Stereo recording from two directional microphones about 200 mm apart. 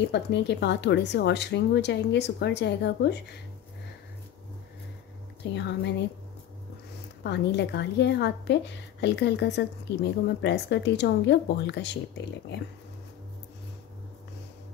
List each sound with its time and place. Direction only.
0.1 s speech: 60° left (ahead or behind)
5.5 s speech: 60° left (ahead or behind)
7.2 s speech: 60° left (ahead or behind)